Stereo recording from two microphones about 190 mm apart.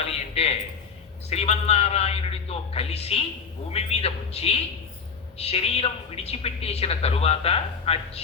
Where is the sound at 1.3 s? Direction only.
35° left (ahead or behind).